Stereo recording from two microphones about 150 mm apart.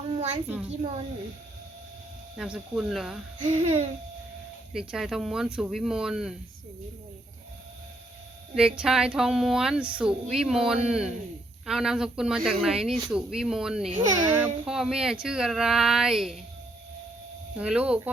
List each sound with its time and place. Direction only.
0.1 s a sound: 45° right (ahead or behind)
0.4 s speech: 10° right (ahead or behind)
2.3 s a woman's voice: 5° right (ahead or behind)
3.4 s speech: 55° right (ahead or behind)
4.7 s a woman's voice: 5° right (ahead or behind)
8.5 s a woman's voice: 5° right (ahead or behind)
17.6 s speech: 5° right (ahead or behind)